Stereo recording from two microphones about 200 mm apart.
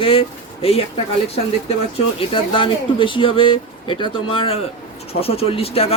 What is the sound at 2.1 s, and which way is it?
Speech, 25° left (ahead or behind).